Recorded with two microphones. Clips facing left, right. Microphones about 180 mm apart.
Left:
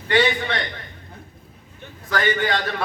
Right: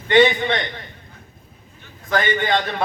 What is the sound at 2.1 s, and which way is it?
Speech, 20° right (ahead or behind).